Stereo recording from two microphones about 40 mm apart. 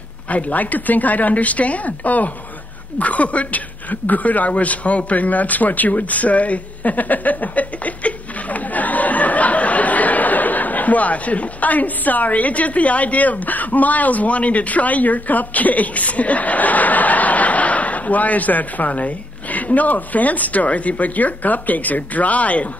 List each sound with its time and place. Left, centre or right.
0.3 s a woman's voice: left